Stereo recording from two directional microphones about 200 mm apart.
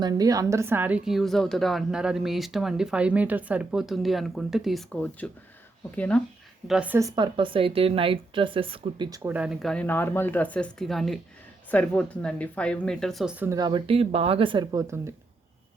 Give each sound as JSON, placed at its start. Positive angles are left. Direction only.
{"t": 0.0, "sound": "a woman's voice", "side_deg": -20}
{"t": 6.7, "sound": "a woman's voice", "side_deg": -5}
{"t": 7.2, "sound": "a woman's voice", "side_deg": -25}
{"t": 13.6, "sound": "speech", "side_deg": -25}